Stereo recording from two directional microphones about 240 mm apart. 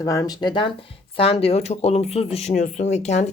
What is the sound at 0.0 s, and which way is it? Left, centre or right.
Speech, centre.